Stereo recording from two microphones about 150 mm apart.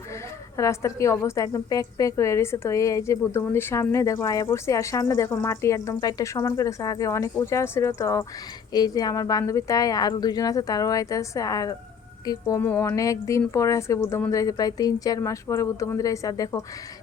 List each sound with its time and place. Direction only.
0.5 s a woman's voice: 20° left (ahead or behind)